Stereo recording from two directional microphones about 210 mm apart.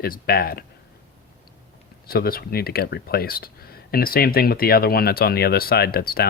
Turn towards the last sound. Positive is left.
turn(degrees=45)  # may be behind; listen again after turning